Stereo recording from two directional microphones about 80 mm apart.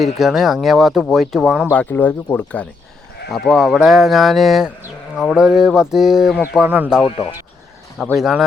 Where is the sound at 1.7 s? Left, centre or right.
Left.